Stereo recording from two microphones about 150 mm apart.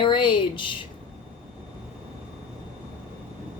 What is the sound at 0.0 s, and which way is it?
Speech, 30° left (ahead or behind).